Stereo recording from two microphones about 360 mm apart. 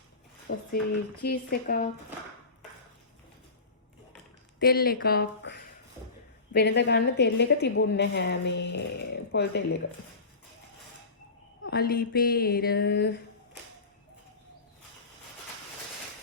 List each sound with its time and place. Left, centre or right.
0.5 s a woman's voice: left
4.6 s a woman's voice: left
11.6 s a woman's voice: left